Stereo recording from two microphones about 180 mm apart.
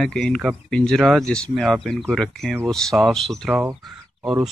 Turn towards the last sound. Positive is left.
turn(degrees=-5)  # may be behind; listen again after turning